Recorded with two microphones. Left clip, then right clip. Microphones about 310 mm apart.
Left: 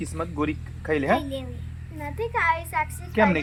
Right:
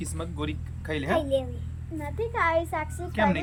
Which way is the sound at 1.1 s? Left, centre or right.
Centre.